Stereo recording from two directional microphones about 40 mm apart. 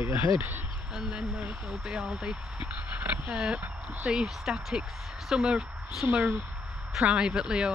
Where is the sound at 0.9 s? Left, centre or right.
Right.